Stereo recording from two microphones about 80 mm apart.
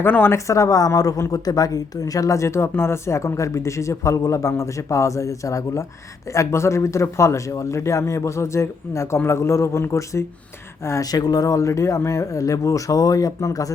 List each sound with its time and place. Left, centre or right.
0.0 s speech: left
0.3 s speech: left
11.0 s speech: left